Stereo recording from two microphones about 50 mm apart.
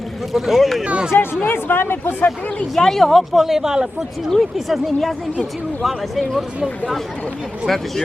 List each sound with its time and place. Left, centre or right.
0.3 s speech: centre
0.9 s speech: right
1.1 s speech: left
2.7 s speech: centre
7.7 s speech: centre